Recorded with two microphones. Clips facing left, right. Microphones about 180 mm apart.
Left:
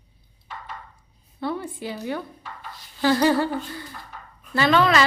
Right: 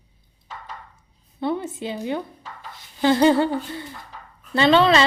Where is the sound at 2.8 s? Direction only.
25° right (ahead or behind).